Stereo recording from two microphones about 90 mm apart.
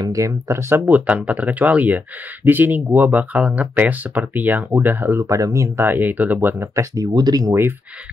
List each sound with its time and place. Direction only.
0.0 s speech: 35° right (ahead or behind)
5.2 s speech: 35° right (ahead or behind); by 6.7 s 20° right (ahead or behind)
6.7 s speech: 35° right (ahead or behind)
7.2 s speech: 50° right (ahead or behind)